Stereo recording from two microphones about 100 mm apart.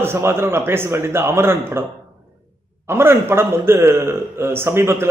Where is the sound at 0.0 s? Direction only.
25° right (ahead or behind).